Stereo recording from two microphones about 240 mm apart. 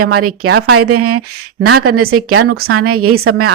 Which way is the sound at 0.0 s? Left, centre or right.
Right.